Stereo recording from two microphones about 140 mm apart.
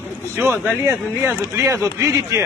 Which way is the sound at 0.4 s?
15° right (ahead or behind).